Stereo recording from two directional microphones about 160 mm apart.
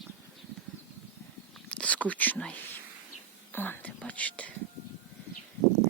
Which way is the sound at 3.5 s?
15° left (ahead or behind).